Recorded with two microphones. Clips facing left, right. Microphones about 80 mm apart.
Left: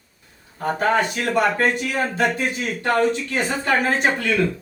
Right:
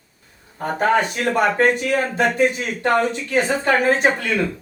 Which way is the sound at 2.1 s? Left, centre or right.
Right.